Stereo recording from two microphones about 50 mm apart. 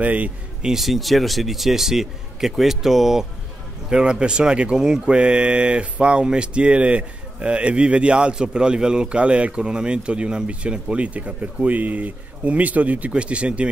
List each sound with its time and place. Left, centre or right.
0.0 s speech: right
0.6 s speech: centre
3.9 s speech: centre